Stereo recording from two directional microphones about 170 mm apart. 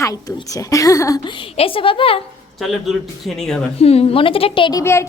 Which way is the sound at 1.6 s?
30° left (ahead or behind).